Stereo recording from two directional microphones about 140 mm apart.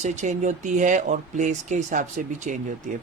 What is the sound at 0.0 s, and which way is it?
Speech, 60° right (ahead or behind).